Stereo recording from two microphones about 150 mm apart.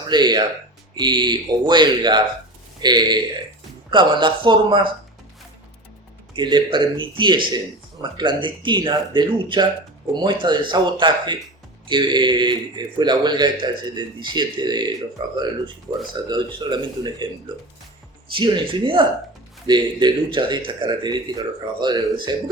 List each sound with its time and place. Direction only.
0.1 s a man's voice: 30° right (ahead or behind)
6.3 s a man's voice: 30° right (ahead or behind)
18.3 s a man's voice: 35° right (ahead or behind)